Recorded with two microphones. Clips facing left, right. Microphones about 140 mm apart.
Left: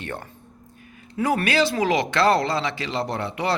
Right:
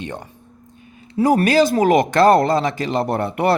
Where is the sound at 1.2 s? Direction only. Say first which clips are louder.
Right 7 dB; 40° right (ahead or behind).